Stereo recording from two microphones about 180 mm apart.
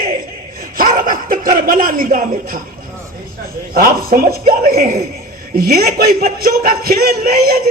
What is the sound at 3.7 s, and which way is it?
Speech, 55° right (ahead or behind).